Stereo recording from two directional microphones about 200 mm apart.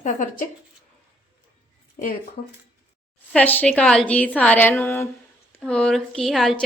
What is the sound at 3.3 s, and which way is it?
A woman's voice, 10° left (ahead or behind).